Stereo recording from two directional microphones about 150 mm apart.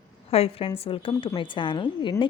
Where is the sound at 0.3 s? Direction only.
40° left (ahead or behind).